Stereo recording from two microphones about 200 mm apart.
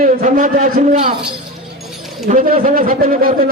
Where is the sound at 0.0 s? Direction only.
40° right (ahead or behind).